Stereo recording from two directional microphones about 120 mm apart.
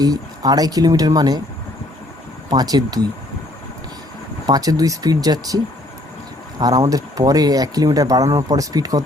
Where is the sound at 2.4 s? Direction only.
35° right (ahead or behind).